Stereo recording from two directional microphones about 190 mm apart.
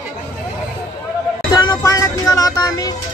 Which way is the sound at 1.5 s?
20° left (ahead or behind).